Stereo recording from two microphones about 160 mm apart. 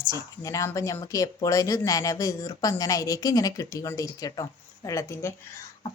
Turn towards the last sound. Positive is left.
turn(degrees=15)  # may be behind; listen again after turning